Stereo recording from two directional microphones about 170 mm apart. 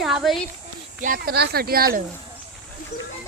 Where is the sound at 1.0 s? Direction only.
60° right (ahead or behind).